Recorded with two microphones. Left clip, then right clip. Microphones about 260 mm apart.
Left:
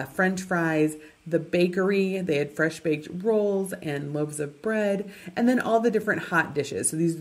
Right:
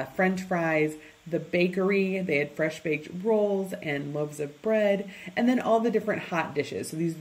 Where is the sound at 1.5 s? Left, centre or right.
Left.